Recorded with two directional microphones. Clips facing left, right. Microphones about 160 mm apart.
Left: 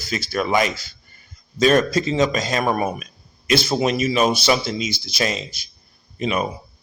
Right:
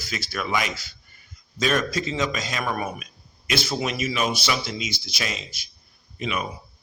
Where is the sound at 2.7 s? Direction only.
25° left (ahead or behind).